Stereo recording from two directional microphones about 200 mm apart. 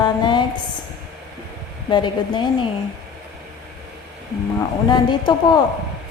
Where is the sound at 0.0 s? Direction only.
20° left (ahead or behind).